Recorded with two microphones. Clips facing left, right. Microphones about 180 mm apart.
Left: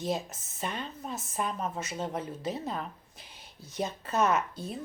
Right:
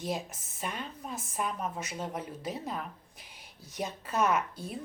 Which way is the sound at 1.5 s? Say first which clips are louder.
Left 1 dB; 30° left (ahead or behind).